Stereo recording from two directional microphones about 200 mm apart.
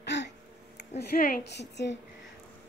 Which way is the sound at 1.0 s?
50° left (ahead or behind).